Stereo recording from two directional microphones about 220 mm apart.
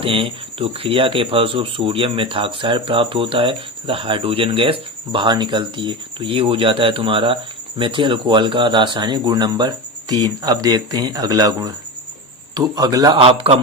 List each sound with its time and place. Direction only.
0.0 s speech: 25° right (ahead or behind)